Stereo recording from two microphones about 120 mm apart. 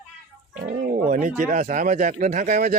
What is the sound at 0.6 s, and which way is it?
Roaring cats, 90° right.